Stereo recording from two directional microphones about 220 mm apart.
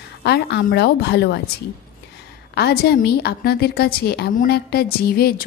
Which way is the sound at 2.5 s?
45° left (ahead or behind).